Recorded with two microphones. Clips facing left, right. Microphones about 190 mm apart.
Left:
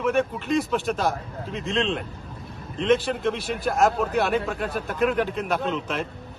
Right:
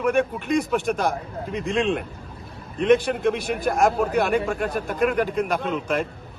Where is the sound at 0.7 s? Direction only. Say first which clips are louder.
Right 2 dB; 10° right (ahead or behind).